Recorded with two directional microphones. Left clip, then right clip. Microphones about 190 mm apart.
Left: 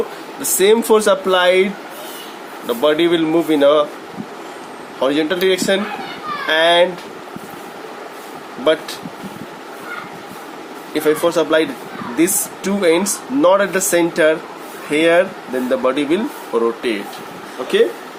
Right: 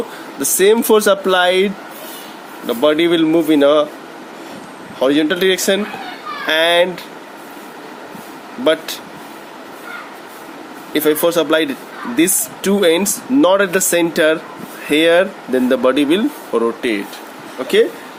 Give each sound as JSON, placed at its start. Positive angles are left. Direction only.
{"t": 0.4, "sound": "speech", "side_deg": -35}
{"t": 4.9, "sound": "speech", "side_deg": -35}
{"t": 8.6, "sound": "speech", "side_deg": -40}
{"t": 10.9, "sound": "speech", "side_deg": -40}